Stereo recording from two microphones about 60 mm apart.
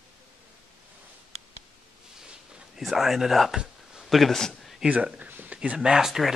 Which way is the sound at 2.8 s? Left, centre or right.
Centre.